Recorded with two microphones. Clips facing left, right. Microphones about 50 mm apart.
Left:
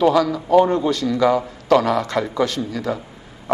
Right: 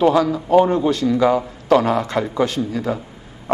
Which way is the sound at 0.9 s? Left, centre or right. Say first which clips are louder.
Right 1 dB; right.